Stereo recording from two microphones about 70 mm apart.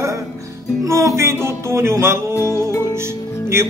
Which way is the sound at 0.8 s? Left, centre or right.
Right.